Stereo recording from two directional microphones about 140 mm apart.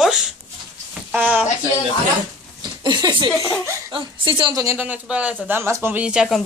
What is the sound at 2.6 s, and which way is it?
A woman's voice, 30° right (ahead or behind).